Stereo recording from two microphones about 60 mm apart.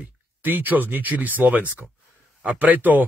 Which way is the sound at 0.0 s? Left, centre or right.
Right.